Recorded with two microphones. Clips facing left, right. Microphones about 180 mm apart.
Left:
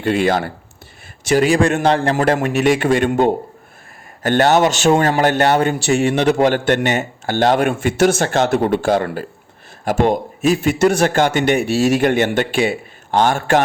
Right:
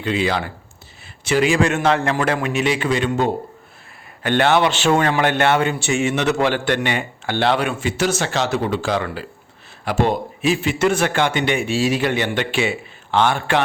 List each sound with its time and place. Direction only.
0.0 s a man's voice: 50° left (ahead or behind)
4.2 s a man's voice: 40° left (ahead or behind)
6.5 s a man's voice: 45° left (ahead or behind)